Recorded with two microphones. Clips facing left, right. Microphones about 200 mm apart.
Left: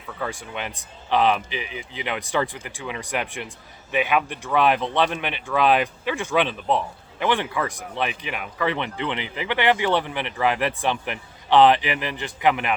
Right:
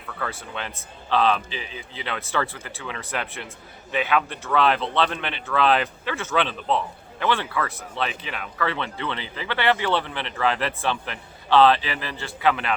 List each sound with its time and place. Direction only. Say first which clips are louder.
0.2 s speech: left 2 dB; 15° left (ahead or behind)